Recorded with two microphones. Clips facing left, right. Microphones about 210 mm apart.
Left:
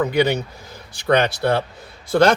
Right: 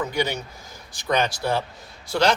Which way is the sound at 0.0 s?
60° left (ahead or behind).